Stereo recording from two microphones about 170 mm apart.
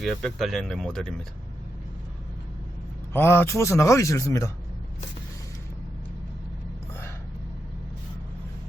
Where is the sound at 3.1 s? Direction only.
15° left (ahead or behind).